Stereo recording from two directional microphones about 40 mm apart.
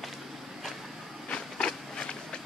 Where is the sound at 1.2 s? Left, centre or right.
Left.